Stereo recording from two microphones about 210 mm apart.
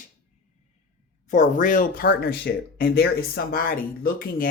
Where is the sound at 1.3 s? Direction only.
35° left (ahead or behind).